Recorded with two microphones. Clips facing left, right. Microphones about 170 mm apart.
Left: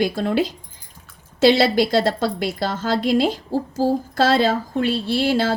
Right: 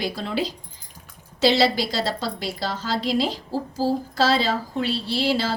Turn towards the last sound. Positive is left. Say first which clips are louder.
# left 4 dB
turn(degrees=50)  # may be behind; listen again after turning